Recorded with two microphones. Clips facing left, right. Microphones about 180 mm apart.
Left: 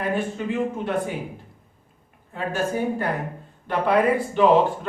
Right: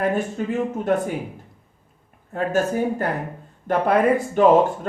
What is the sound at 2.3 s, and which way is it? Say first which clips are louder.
Speech: right 5 dB; 45° right (ahead or behind).